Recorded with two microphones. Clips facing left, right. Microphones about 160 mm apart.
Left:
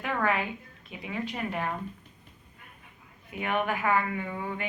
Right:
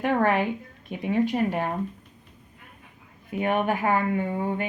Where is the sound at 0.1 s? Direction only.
40° right (ahead or behind).